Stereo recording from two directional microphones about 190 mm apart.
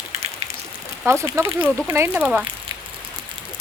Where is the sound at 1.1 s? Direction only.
15° right (ahead or behind).